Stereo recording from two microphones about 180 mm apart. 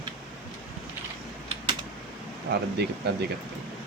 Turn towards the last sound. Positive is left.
turn(degrees=-65)  # may be behind; listen again after turning